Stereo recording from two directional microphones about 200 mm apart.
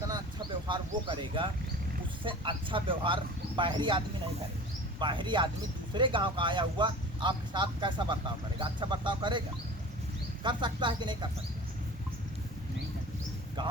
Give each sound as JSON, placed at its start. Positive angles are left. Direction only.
{"t": 0.7, "sound": "speech", "side_deg": -25}
{"t": 10.4, "sound": "speech", "side_deg": -25}